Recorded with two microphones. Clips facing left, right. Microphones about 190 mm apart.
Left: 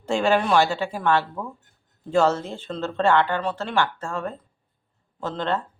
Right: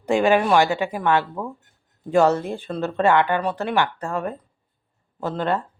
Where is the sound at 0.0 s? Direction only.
15° right (ahead or behind).